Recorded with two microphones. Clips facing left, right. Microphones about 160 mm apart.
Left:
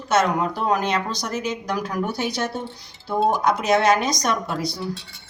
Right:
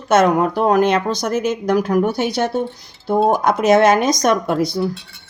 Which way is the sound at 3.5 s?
50° right (ahead or behind).